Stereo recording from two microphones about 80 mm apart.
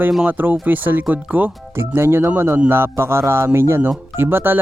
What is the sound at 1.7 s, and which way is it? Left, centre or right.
Speech, right.